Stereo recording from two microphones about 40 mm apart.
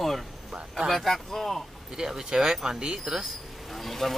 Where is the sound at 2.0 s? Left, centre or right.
Centre.